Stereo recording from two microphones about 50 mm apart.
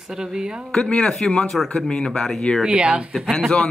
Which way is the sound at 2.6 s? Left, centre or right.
Centre.